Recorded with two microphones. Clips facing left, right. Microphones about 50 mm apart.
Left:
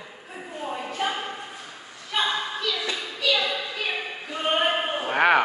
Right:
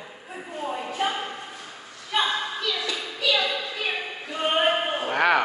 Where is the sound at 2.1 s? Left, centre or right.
Centre.